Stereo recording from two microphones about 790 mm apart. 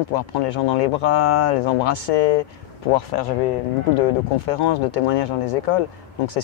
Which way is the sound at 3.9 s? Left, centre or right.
Left.